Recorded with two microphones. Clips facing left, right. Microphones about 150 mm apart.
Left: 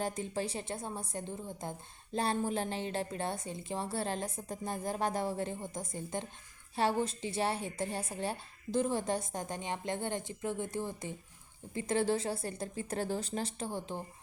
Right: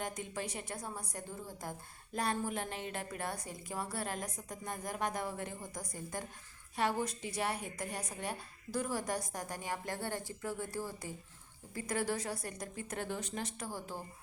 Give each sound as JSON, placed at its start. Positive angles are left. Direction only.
{"t": 0.0, "sound": "a woman's voice", "side_deg": 30}